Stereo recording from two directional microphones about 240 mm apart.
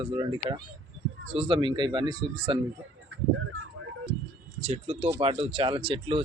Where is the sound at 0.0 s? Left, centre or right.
Centre.